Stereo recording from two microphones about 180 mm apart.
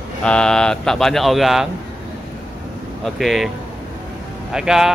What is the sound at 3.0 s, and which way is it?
Speech, centre (ahead or behind).